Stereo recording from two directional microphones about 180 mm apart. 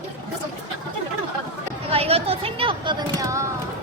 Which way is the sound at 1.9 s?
35° right (ahead or behind).